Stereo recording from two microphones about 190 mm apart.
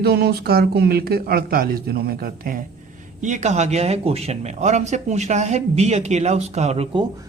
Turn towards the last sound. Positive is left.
turn(degrees=-35)  # may be behind; listen again after turning